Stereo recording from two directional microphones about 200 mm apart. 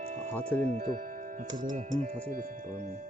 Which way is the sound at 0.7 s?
40° right (ahead or behind).